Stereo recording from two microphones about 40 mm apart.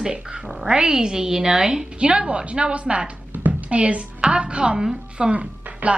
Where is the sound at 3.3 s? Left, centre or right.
Right.